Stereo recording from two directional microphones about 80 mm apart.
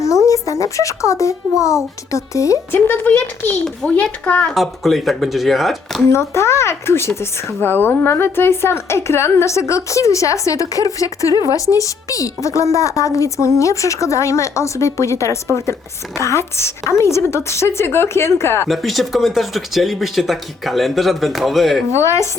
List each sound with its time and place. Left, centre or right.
0.0 s a child's voice: left
2.7 s speech: left
4.5 s speech: centre
6.1 s speech: left
18.7 s speech: centre
21.9 s speech: left